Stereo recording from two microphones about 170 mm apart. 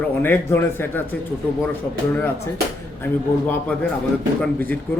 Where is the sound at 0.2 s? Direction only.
10° left (ahead or behind).